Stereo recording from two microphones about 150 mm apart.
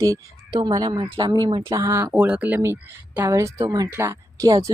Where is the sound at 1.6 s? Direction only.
20° right (ahead or behind).